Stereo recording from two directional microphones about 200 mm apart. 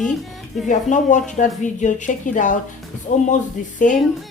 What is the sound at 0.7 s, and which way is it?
Speech, 40° left (ahead or behind).